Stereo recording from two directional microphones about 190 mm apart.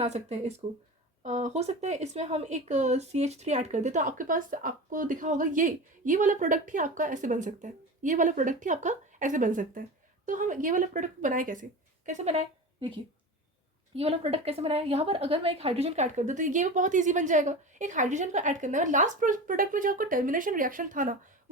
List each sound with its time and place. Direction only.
0.0 s a woman's voice: 35° right (ahead or behind)